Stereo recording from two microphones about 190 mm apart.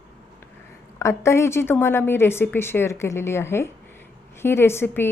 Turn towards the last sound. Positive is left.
turn(degrees=10)  # may be behind; listen again after turning